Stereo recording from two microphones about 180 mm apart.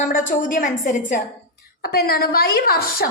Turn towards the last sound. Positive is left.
turn(degrees=55)  # may be behind; listen again after turning